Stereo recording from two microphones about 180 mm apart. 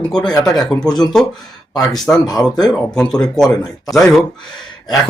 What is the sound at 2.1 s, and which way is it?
Speech, 15° left (ahead or behind).